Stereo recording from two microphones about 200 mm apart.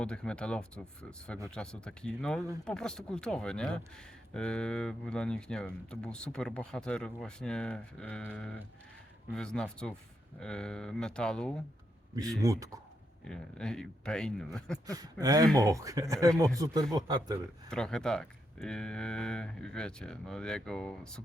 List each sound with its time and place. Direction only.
0.0 s speech: 5° left (ahead or behind)
12.4 s speech: 15° right (ahead or behind)
13.2 s speech: 5° left (ahead or behind)
14.8 s speech: 20° right (ahead or behind)
17.7 s speech: 5° left (ahead or behind)